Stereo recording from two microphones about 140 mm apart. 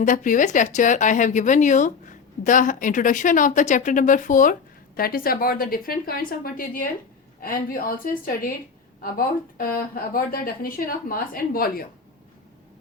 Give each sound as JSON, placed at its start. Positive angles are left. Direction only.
{"t": 0.0, "sound": "speech", "side_deg": 65}
{"t": 4.9, "sound": "a woman's voice", "side_deg": 90}